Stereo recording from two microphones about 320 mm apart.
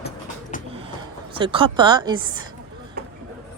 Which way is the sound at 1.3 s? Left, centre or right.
Centre.